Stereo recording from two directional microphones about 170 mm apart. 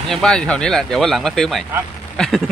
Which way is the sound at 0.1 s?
5° left (ahead or behind).